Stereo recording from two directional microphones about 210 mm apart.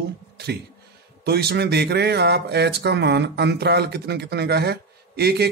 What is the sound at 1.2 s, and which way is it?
Speech, 50° right (ahead or behind).